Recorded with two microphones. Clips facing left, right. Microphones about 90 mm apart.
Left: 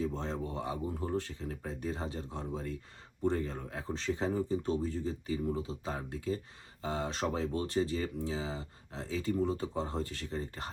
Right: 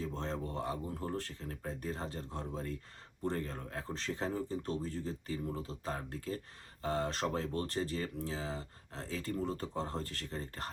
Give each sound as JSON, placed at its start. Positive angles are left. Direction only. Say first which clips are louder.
{"t": 0.0, "sound": "speech", "louder": "left 3 dB", "side_deg": 5}